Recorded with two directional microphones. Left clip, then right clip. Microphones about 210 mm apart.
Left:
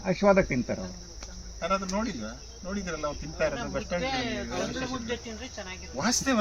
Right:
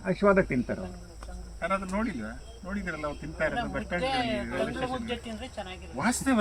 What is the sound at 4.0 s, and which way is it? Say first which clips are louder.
Speech: right 3 dB; 40° right (ahead or behind).